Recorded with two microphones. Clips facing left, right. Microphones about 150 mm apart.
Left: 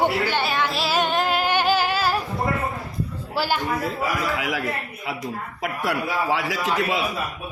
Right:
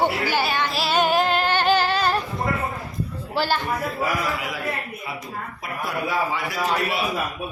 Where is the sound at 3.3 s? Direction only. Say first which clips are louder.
Right 1 dB; 5° left (ahead or behind).